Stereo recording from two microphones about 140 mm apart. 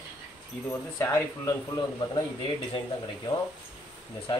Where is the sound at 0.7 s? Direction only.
20° left (ahead or behind).